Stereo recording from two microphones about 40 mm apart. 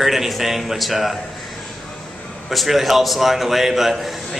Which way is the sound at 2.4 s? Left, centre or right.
Centre.